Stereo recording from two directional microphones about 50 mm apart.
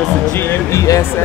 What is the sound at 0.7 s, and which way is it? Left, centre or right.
Speech, left.